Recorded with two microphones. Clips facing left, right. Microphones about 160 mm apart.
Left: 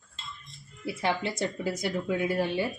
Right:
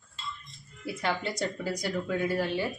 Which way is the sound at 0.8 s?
25° left (ahead or behind).